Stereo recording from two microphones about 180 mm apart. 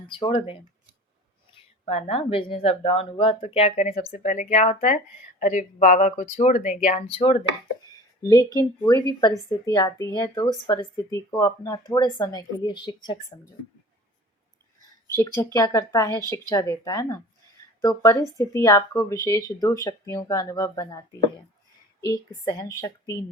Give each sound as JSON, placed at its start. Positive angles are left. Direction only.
{"t": 0.0, "sound": "speech", "side_deg": 30}
{"t": 1.8, "sound": "speech", "side_deg": 35}
{"t": 8.2, "sound": "speech", "side_deg": 20}
{"t": 15.1, "sound": "speech", "side_deg": 15}
{"t": 22.0, "sound": "speech", "side_deg": 20}